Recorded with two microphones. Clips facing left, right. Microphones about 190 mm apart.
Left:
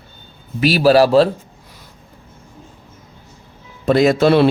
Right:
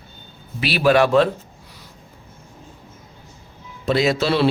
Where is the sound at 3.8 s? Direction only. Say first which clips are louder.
Left 6 dB; 50° left (ahead or behind).